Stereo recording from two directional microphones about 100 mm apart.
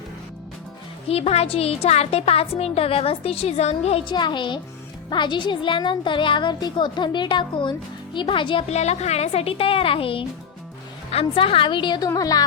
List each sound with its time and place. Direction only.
1.0 s speech: 90° left
4.0 s speech: 50° left (ahead or behind)
11.1 s speech: 75° left (ahead or behind); by 12.0 s 50° left (ahead or behind)
12.0 s music: 40° left (ahead or behind)